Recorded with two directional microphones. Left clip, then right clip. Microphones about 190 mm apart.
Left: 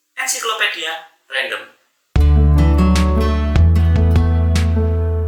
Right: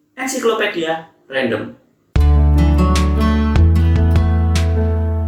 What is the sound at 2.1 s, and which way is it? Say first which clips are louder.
Music: even; centre (ahead or behind).